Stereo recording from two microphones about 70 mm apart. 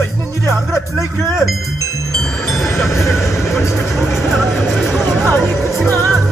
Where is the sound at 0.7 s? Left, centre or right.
Centre.